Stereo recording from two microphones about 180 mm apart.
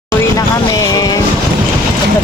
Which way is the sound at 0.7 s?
20° left (ahead or behind).